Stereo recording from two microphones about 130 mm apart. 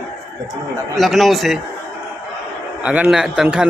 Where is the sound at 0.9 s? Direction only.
Centre (ahead or behind).